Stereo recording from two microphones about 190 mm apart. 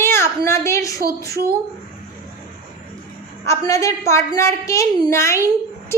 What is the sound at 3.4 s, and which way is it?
A woman's voice, 15° left (ahead or behind).